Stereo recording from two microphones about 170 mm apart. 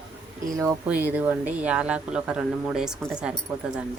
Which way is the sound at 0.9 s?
10° right (ahead or behind).